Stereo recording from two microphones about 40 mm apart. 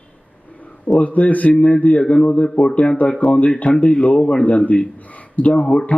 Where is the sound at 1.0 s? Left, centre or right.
Left.